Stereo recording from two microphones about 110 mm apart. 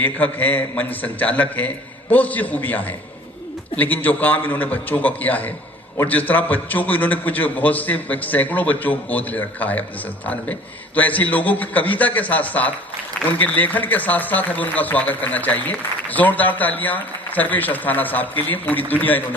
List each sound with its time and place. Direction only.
0.0 s a man's voice: 15° left (ahead or behind)